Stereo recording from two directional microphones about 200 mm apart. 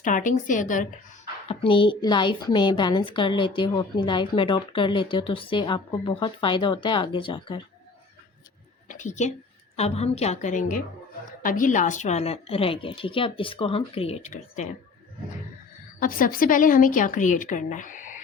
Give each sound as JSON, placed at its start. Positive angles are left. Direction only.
{"t": 0.0, "sound": "a woman's voice", "side_deg": 40}
{"t": 1.5, "sound": "a woman's voice", "side_deg": 25}
{"t": 8.9, "sound": "a woman's voice", "side_deg": 40}
{"t": 16.0, "sound": "a woman's voice", "side_deg": 45}